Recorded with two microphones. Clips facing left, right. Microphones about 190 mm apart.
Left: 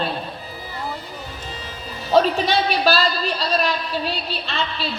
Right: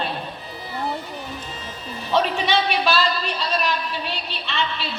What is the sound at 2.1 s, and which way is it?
A woman's voice, 35° left (ahead or behind).